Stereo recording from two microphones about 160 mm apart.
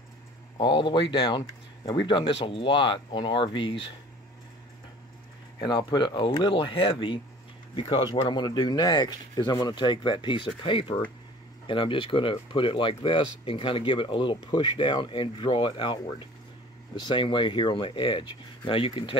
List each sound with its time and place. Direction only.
0.6 s speech: 30° left (ahead or behind)
5.6 s speech: 25° left (ahead or behind)